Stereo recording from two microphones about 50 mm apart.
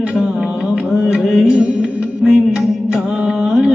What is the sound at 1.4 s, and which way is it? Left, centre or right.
Music, centre.